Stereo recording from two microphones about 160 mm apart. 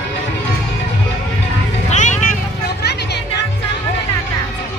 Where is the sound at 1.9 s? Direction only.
50° left (ahead or behind).